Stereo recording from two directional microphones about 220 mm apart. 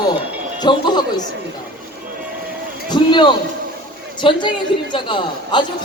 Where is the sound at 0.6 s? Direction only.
20° left (ahead or behind).